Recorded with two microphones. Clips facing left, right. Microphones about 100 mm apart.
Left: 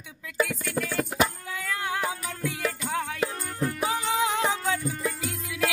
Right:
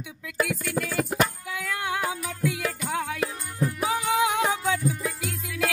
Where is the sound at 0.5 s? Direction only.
Centre (ahead or behind).